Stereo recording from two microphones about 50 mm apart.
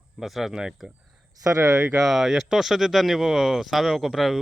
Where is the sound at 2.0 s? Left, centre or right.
Centre.